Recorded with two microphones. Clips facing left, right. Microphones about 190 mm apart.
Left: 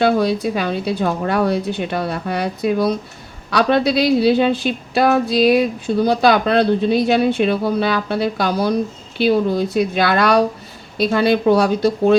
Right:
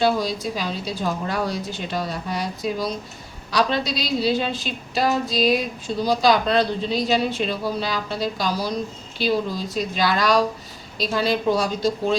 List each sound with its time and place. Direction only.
0.0 s a woman's voice: 60° left (ahead or behind)